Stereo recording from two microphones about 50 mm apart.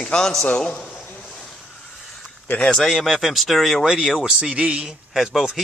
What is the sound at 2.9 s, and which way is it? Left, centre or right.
Speech, centre.